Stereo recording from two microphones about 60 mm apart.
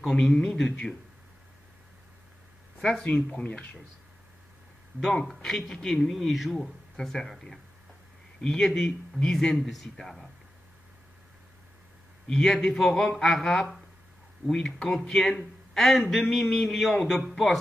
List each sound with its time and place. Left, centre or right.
0.2 s speech: centre
2.8 s speech: centre
5.0 s speech: centre
12.3 s speech: centre